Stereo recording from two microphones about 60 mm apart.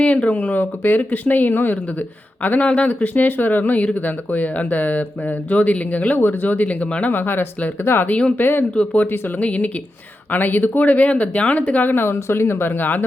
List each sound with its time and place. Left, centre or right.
0.0 s speech: left
8.7 s speech: left
9.0 s speech: left
9.4 s speech: left